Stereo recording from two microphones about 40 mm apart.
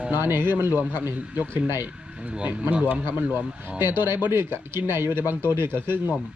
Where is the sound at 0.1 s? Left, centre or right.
Right.